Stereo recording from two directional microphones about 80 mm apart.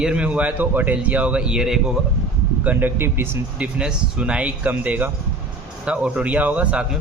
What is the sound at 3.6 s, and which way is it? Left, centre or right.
A man's voice, centre.